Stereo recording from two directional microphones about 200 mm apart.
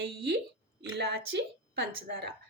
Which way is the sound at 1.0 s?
55° right (ahead or behind).